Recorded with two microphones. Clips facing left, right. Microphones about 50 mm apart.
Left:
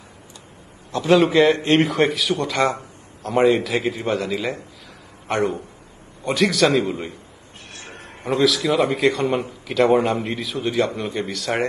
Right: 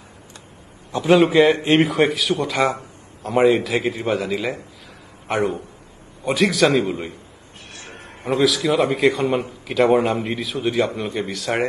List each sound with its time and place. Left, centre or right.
0.9 s a man's voice: centre
7.9 s a sound: centre
8.9 s a man's voice: centre